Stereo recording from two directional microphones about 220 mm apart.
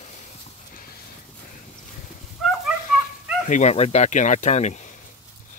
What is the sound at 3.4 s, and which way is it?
Speech, 30° left (ahead or behind).